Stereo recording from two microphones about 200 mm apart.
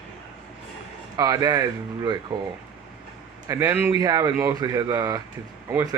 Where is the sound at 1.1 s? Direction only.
15° right (ahead or behind).